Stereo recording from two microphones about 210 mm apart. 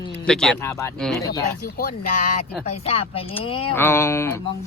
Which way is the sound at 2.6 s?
30° left (ahead or behind).